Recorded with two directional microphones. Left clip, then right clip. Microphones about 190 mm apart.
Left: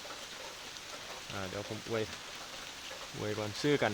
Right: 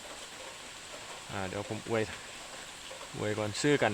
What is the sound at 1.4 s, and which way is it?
Speech, 20° right (ahead or behind).